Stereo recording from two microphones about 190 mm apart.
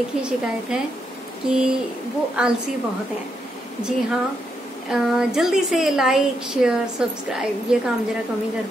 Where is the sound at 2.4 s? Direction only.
5° right (ahead or behind).